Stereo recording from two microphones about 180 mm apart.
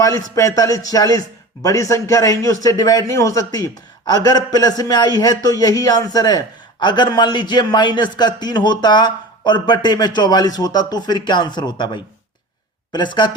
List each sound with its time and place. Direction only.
0.3 s a man's voice: 20° left (ahead or behind)